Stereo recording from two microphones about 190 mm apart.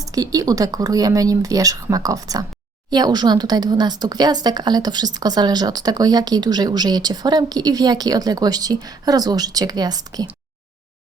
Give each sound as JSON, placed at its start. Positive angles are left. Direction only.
{"t": 0.0, "sound": "speech", "side_deg": -20}